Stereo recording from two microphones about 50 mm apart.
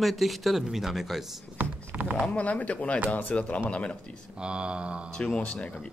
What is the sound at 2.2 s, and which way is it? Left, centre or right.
Speech, left.